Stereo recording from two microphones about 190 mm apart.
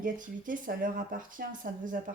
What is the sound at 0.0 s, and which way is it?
Speech, 45° right (ahead or behind).